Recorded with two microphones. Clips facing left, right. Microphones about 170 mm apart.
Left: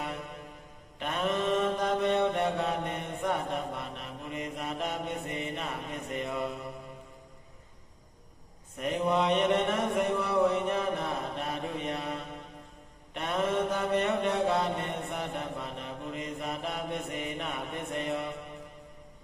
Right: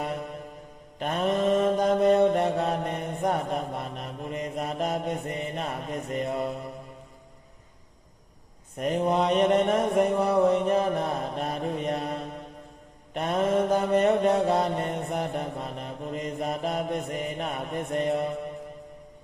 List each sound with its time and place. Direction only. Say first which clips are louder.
0.9 s mantra: right 5 dB; 40° right (ahead or behind)
8.8 s mantra: right 3 dB; 40° right (ahead or behind)